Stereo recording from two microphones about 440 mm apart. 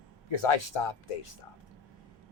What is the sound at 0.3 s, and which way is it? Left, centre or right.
Speech, left.